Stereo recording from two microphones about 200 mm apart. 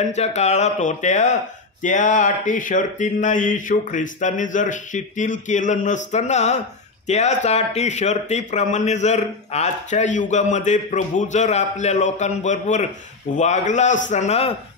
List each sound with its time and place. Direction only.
0.0 s speech: 35° left (ahead or behind)